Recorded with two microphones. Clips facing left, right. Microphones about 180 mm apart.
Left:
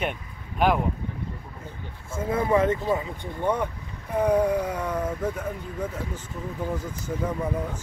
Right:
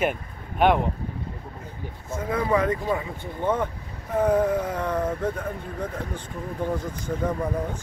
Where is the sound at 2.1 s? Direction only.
25° left (ahead or behind).